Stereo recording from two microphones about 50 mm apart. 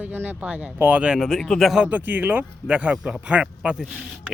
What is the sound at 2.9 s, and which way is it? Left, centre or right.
Speech, centre.